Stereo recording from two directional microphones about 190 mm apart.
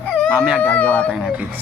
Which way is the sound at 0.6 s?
10° left (ahead or behind).